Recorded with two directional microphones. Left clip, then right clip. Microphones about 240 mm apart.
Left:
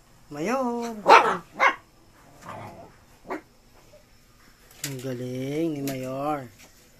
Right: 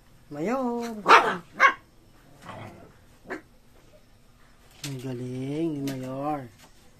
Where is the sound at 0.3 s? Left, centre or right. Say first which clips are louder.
Left 2 dB; centre.